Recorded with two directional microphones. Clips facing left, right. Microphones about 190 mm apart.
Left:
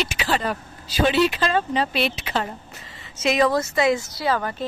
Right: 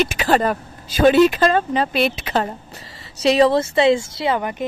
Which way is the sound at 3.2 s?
30° right (ahead or behind).